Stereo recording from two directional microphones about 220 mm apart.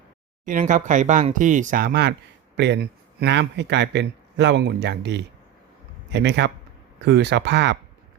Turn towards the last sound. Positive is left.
turn(degrees=-50)  # may be behind; listen again after turning